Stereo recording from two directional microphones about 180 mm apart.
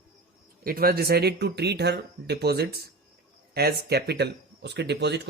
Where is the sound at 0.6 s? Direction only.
55° right (ahead or behind).